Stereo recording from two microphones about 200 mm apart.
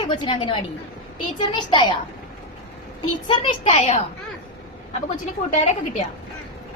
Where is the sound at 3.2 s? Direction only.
25° left (ahead or behind).